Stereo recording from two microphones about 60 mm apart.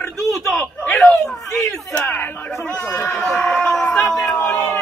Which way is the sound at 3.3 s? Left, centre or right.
Left.